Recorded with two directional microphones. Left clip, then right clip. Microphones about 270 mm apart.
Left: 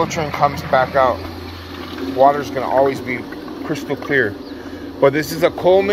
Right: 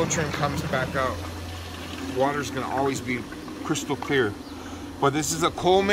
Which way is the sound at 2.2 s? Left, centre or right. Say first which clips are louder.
Left 13 dB; centre.